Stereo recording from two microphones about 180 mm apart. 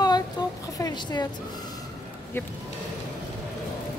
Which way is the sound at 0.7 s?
20° left (ahead or behind).